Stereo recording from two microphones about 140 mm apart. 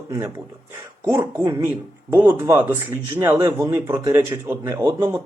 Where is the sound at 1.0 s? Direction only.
20° right (ahead or behind).